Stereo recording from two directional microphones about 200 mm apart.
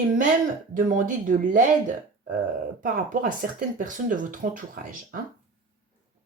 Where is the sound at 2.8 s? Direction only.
45° right (ahead or behind).